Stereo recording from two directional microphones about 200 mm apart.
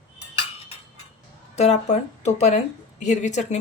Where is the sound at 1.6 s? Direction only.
35° left (ahead or behind).